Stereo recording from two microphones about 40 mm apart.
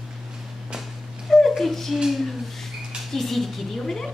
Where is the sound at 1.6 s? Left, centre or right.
Centre.